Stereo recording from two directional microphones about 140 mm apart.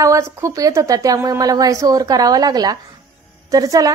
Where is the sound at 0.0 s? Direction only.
20° right (ahead or behind).